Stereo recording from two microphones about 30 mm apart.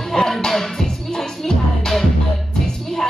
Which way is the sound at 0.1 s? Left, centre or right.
Centre.